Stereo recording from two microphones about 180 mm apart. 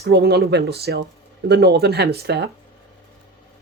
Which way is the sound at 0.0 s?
65° right (ahead or behind).